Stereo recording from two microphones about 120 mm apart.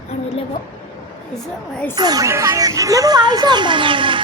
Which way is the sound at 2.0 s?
30° right (ahead or behind).